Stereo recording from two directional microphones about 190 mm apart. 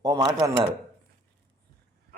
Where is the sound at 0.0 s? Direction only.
20° right (ahead or behind).